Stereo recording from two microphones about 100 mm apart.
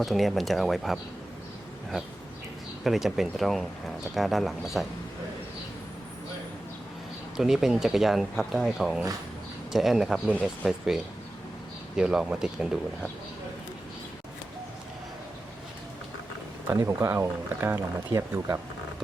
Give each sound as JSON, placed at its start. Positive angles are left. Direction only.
{"t": 0.0, "sound": "speech", "side_deg": 0}
{"t": 2.8, "sound": "speech", "side_deg": -5}
{"t": 7.3, "sound": "speech", "side_deg": -5}
{"t": 16.6, "sound": "speech", "side_deg": -25}